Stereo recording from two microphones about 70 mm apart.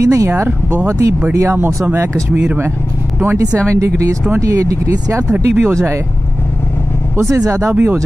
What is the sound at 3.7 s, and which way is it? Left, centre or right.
Speech, right.